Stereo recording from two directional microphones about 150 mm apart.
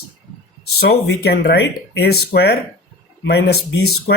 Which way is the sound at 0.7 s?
90° left.